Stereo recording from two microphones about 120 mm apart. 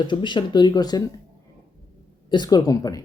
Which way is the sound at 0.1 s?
40° left (ahead or behind).